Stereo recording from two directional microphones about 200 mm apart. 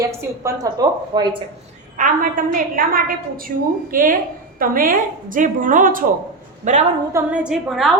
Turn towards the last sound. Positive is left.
turn(degrees=0)  # may be behind; listen again after turning